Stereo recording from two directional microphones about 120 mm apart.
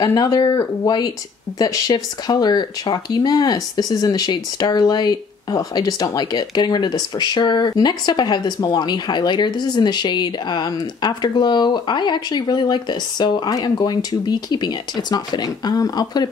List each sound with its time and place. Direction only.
0.0 s speech: 30° left (ahead or behind)